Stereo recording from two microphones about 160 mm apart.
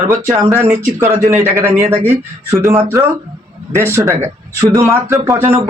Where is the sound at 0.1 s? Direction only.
20° right (ahead or behind).